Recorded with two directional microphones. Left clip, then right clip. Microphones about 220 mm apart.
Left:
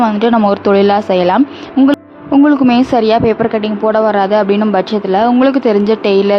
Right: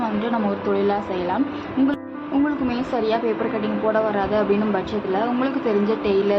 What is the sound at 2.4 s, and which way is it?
Speech, 50° left (ahead or behind).